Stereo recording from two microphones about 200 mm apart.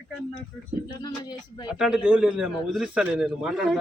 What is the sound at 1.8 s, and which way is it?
Speech, 5° right (ahead or behind).